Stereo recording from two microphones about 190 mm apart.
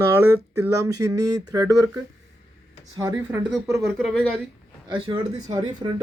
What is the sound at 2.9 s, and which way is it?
Speech, 15° right (ahead or behind).